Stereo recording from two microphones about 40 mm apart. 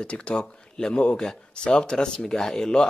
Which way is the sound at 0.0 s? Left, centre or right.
Left.